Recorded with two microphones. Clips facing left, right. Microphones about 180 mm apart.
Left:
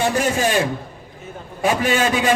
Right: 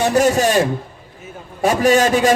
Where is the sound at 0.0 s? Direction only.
40° right (ahead or behind).